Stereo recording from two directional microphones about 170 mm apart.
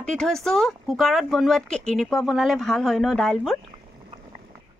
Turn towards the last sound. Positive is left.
turn(degrees=5)  # may be behind; listen again after turning